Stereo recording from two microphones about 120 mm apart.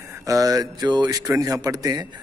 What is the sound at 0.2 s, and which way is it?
Speech, 30° right (ahead or behind).